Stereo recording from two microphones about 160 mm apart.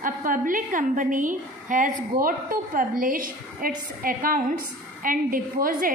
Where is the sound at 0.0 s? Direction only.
55° right (ahead or behind).